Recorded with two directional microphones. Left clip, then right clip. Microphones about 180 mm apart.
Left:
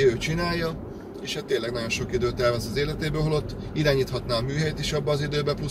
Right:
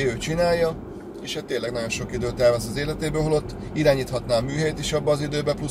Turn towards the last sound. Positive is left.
turn(degrees=-20)  # may be behind; listen again after turning